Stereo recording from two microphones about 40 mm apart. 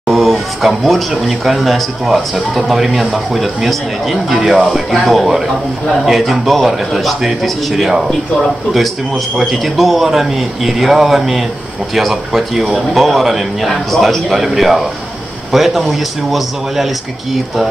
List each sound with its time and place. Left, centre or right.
0.1 s speech: centre
9.4 s speech: centre